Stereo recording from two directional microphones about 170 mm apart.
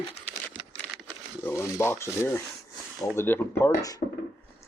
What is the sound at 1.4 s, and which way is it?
Speech, 15° left (ahead or behind).